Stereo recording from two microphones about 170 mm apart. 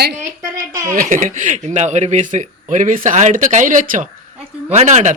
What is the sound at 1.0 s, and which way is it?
Speech, 50° right (ahead or behind).